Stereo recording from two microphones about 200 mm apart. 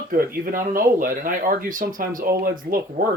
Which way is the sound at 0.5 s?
45° right (ahead or behind).